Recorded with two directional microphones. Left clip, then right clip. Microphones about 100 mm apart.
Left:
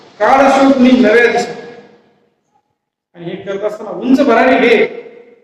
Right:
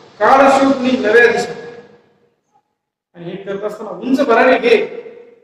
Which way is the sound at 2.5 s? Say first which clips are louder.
Right 1 dB; 30° left (ahead or behind).